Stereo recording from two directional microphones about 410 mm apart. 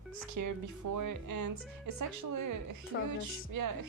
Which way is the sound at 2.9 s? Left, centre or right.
Left.